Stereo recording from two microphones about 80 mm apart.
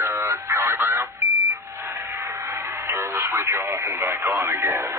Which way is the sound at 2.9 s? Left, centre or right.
Right.